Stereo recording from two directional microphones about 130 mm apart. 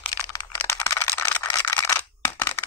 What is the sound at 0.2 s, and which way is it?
Computer keyboard, 25° left (ahead or behind).